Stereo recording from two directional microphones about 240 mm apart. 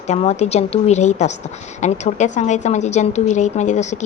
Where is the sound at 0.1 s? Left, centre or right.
Left.